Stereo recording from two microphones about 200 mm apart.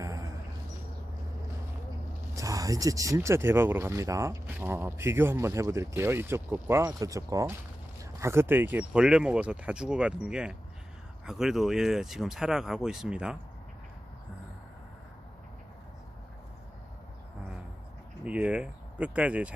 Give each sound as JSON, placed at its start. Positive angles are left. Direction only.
{"t": 0.0, "sound": "a sound", "side_deg": -15}
{"t": 2.3, "sound": "speech", "side_deg": -15}
{"t": 18.3, "sound": "speech", "side_deg": -5}